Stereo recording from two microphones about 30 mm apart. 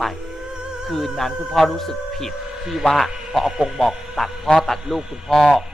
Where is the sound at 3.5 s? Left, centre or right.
Centre.